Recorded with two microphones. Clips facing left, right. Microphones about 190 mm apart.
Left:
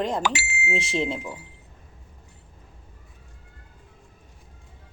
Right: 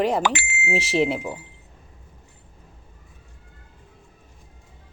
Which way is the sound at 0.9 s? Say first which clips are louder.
Right 6 dB; 70° right (ahead or behind).